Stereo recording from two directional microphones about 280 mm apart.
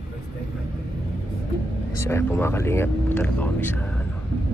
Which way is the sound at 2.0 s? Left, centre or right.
Centre.